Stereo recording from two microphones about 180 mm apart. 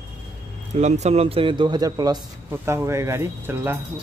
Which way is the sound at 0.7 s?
40° right (ahead or behind).